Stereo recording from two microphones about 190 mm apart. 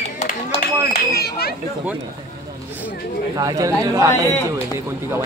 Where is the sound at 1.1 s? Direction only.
55° left (ahead or behind).